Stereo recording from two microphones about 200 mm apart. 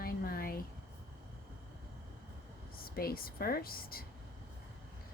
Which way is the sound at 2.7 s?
50° left (ahead or behind).